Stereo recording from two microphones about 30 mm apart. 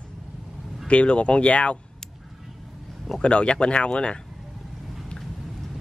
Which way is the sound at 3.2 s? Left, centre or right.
Left.